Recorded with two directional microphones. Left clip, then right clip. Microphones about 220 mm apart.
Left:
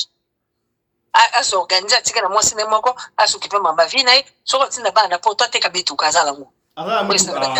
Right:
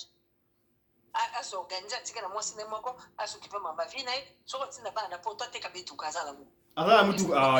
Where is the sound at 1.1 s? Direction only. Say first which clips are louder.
Left 19 dB; 40° left (ahead or behind).